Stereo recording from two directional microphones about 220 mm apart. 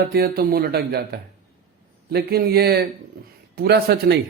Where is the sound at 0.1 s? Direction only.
45° right (ahead or behind).